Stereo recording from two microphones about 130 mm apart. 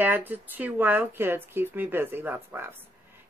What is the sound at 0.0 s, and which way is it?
Speech, 15° right (ahead or behind).